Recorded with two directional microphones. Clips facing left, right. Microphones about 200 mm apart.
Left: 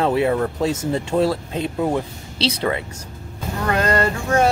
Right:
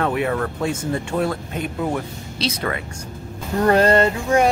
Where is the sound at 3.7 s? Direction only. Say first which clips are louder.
Right 4 dB; 30° right (ahead or behind).